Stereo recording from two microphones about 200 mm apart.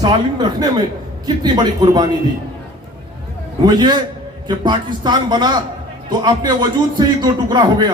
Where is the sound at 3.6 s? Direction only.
20° right (ahead or behind).